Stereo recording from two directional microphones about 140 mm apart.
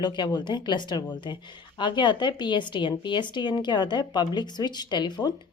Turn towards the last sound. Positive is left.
turn(degrees=30)  # may be behind; listen again after turning